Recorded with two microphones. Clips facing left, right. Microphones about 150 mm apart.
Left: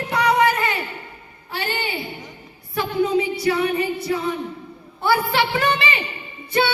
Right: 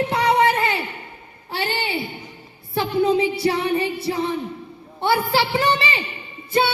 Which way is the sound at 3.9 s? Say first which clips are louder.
Even; 25° right (ahead or behind).